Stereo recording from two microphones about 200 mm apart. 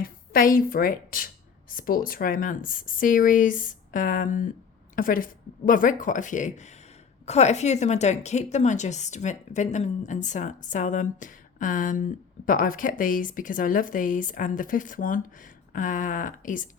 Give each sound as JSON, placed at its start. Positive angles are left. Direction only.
{"t": 0.0, "sound": "a woman's voice", "side_deg": 45}